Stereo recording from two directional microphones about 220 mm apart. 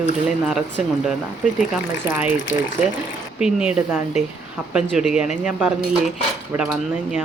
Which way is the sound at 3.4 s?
5° right (ahead or behind).